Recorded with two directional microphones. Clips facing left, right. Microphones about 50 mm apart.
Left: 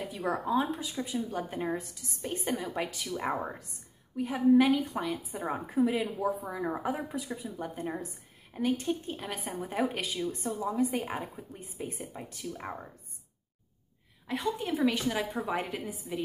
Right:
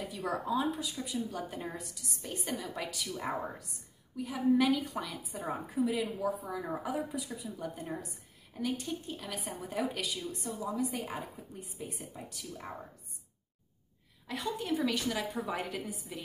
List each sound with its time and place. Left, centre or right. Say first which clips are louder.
0.1 s speech: left 4 dB; left
14.2 s speech: left 4 dB; centre